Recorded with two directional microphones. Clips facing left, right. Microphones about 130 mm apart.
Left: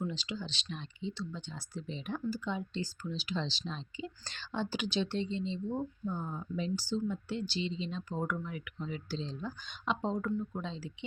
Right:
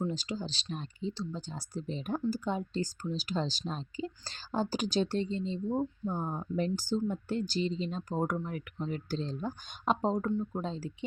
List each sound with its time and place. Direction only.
0.0 s speech: 40° right (ahead or behind)
6.1 s speech: 50° right (ahead or behind)
10.2 s speech: 30° right (ahead or behind)
10.6 s speech: 45° right (ahead or behind)